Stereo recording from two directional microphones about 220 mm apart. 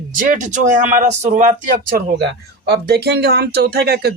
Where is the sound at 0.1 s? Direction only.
35° right (ahead or behind).